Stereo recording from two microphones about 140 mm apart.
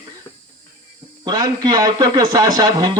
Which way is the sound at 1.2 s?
30° right (ahead or behind).